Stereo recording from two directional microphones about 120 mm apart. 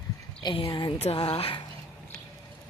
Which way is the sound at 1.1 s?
50° left (ahead or behind).